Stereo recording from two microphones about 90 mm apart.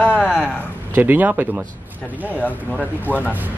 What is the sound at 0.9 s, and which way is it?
Speech, 20° right (ahead or behind).